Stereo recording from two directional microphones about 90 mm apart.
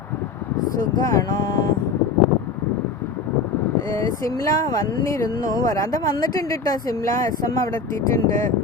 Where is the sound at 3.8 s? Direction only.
35° left (ahead or behind).